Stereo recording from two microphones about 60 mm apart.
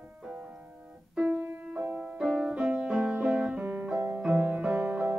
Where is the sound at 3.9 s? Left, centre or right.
Right.